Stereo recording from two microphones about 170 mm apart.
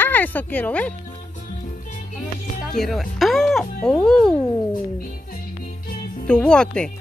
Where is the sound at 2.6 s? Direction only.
Centre (ahead or behind).